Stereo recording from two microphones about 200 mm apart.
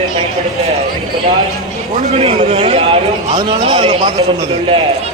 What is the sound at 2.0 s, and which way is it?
A man's voice, 30° right (ahead or behind).